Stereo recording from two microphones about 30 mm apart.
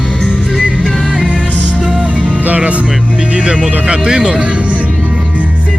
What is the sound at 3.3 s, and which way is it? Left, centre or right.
Speech, right.